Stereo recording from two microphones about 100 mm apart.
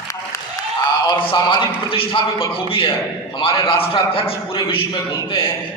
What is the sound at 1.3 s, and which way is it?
A man's voice, 55° left (ahead or behind).